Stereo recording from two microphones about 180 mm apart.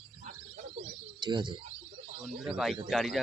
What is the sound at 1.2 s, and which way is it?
Speech, 25° right (ahead or behind).